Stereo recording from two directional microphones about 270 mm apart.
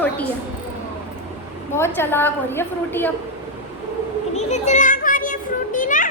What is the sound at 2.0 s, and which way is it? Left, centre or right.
A woman's voice, centre.